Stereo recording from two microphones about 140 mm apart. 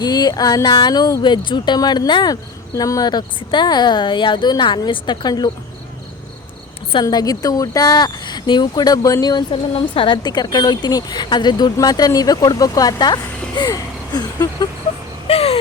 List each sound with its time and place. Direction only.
0.0 s a woman's voice: 30° left (ahead or behind)
7.0 s a woman's voice: 25° left (ahead or behind)
9.7 s a woman's voice: 40° left (ahead or behind)
15.3 s a sound: 45° left (ahead or behind)